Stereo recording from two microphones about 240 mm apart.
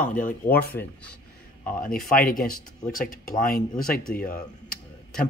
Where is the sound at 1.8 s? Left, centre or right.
Left.